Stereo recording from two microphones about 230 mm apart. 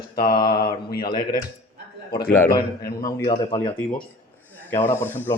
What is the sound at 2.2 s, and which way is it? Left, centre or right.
Speech, centre.